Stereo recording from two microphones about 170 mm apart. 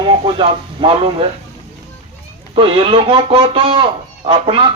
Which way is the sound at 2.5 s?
30° right (ahead or behind).